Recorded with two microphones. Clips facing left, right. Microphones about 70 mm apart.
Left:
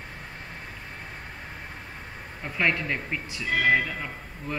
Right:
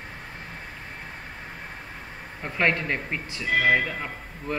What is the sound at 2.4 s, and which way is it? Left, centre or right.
A man's voice, centre.